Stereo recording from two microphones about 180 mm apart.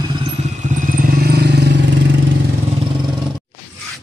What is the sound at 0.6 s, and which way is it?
Vehicle, 45° right (ahead or behind).